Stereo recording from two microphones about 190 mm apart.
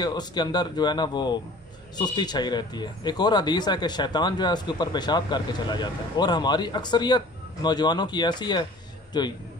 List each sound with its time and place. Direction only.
0.0 s speech: 20° left (ahead or behind)